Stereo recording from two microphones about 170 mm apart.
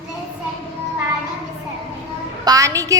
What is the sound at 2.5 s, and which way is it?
Speech, 20° right (ahead or behind).